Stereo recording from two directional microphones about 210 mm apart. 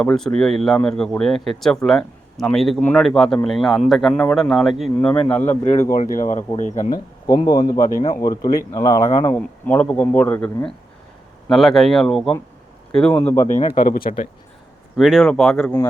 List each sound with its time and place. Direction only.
0.0 s speech: 5° left (ahead or behind)
5.9 s speech: 40° left (ahead or behind)
7.3 s speech: 20° left (ahead or behind)
13.5 s speech: 35° left (ahead or behind)
14.9 s speech: centre (ahead or behind)